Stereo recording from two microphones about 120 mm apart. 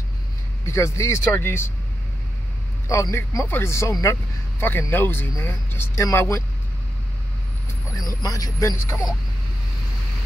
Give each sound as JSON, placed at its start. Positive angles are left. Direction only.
{"t": 0.7, "sound": "speech", "side_deg": 25}
{"t": 2.9, "sound": "speech", "side_deg": 25}
{"t": 7.9, "sound": "speech", "side_deg": 30}